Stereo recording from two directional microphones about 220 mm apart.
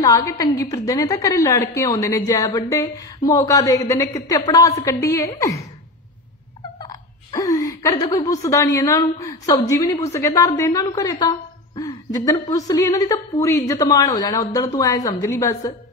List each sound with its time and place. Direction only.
0.0 s a woman's voice: 15° left (ahead or behind)
6.8 s a woman's voice: 15° left (ahead or behind)